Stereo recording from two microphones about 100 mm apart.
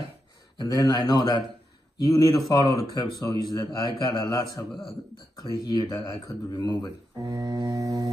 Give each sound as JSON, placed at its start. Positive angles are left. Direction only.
{"t": 0.6, "sound": "speech", "side_deg": 40}
{"t": 7.2, "sound": "mantra", "side_deg": -40}